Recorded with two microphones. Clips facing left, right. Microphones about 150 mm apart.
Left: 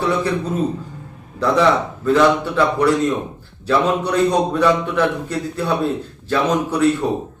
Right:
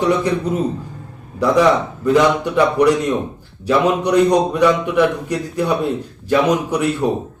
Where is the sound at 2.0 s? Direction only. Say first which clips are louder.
Right 1 dB; 15° right (ahead or behind).